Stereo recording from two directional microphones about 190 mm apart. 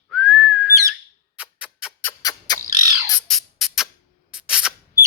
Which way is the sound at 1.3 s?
5° right (ahead or behind).